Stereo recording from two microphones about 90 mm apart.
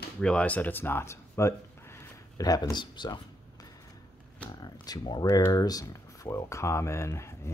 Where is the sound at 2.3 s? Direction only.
45° left (ahead or behind).